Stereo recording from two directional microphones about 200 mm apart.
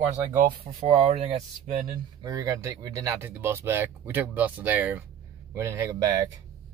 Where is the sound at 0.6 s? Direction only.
25° right (ahead or behind).